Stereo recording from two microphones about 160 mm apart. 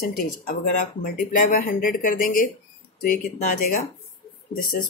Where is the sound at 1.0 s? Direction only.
60° left (ahead or behind).